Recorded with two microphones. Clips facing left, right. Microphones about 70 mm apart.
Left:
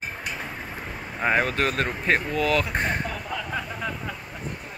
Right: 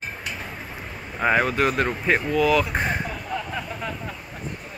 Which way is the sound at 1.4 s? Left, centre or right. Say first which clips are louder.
Right 3 dB; centre.